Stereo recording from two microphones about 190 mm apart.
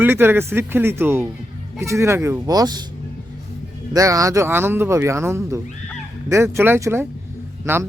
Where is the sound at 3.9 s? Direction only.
20° right (ahead or behind).